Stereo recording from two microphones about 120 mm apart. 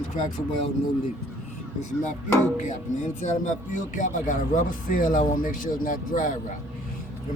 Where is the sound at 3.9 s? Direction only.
90° left.